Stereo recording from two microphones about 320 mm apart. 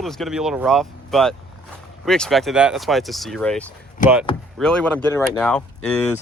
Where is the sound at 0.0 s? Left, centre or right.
Centre.